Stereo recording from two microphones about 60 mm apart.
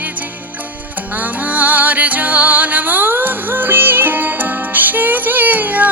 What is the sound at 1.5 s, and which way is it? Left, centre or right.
Music, right.